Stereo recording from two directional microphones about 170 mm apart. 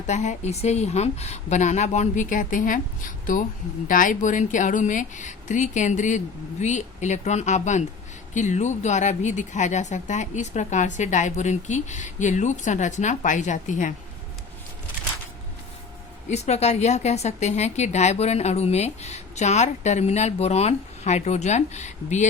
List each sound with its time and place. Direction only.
0.1 s speech: 45° left (ahead or behind)
3.8 s speech: 50° left (ahead or behind)
16.3 s a woman's voice: 40° left (ahead or behind)